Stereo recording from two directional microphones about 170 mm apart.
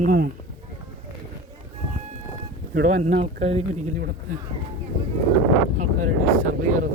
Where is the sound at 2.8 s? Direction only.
45° right (ahead or behind).